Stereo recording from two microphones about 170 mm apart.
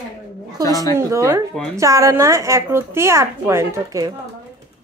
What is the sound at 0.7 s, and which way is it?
Speech, 20° left (ahead or behind).